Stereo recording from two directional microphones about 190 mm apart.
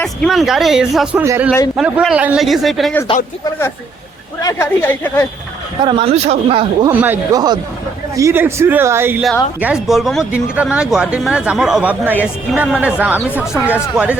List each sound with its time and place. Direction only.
0.0 s speech: centre (ahead or behind)
1.2 s speech: 15° right (ahead or behind)
1.7 s speech: 5° right (ahead or behind)
4.4 s speech: 15° left (ahead or behind)
5.8 s speech: 30° right (ahead or behind)
6.8 s speech: 15° right (ahead or behind)